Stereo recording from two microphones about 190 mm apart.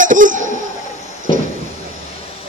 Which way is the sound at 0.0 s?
45° right (ahead or behind).